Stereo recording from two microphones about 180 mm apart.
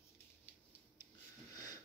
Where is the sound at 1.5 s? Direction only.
20° left (ahead or behind).